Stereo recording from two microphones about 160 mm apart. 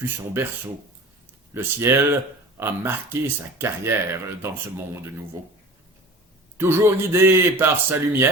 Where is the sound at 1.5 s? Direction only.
15° right (ahead or behind).